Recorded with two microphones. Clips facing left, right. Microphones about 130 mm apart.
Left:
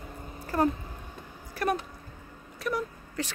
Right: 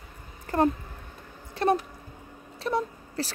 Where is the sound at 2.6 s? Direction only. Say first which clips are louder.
Right 3 dB; 30° right (ahead or behind).